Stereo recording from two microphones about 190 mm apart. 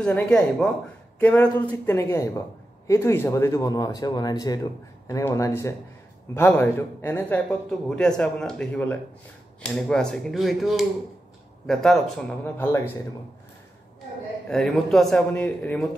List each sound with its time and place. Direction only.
0.0 s a man's voice: 5° left (ahead or behind)
14.5 s a man's voice: centre (ahead or behind)